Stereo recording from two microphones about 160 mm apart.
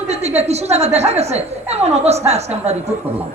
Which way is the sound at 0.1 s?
40° right (ahead or behind).